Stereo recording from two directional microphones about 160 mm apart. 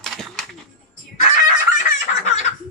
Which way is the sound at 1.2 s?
50° left (ahead or behind).